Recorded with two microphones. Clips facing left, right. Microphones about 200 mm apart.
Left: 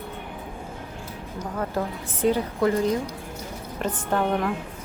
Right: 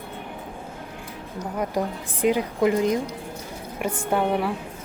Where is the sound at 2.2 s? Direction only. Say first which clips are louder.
Right 1 dB; 15° right (ahead or behind).